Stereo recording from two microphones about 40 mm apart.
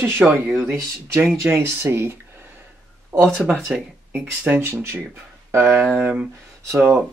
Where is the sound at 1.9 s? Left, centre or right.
Right.